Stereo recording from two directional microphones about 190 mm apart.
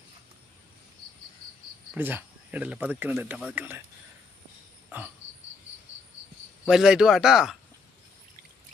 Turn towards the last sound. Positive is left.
turn(degrees=-5)  # may be behind; listen again after turning